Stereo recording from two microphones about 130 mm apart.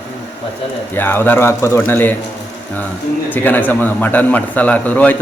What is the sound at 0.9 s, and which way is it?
A man's voice, 15° left (ahead or behind).